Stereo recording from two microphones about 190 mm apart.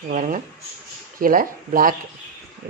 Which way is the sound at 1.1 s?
50° right (ahead or behind).